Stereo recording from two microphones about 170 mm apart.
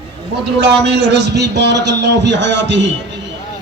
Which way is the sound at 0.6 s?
90° right.